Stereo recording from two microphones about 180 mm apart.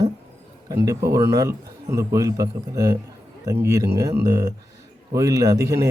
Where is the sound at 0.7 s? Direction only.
20° right (ahead or behind).